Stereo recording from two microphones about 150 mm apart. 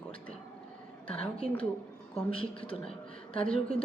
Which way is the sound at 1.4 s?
10° left (ahead or behind).